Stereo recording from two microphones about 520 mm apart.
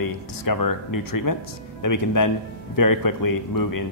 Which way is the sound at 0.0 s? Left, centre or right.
Left.